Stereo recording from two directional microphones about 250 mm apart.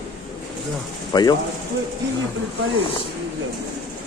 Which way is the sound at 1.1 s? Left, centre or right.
Centre.